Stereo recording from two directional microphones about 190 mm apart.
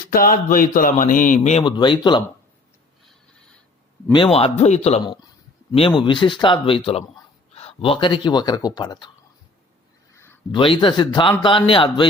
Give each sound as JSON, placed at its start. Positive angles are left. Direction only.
{"t": 0.1, "sound": "speech", "side_deg": 45}
{"t": 1.6, "sound": "speech", "side_deg": 25}
{"t": 4.1, "sound": "a man's voice", "side_deg": 30}
{"t": 10.5, "sound": "speech", "side_deg": 25}